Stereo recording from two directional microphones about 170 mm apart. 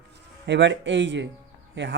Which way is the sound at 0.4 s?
90° right.